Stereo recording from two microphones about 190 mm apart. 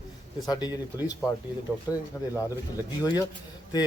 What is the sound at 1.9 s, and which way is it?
Speech, 20° left (ahead or behind).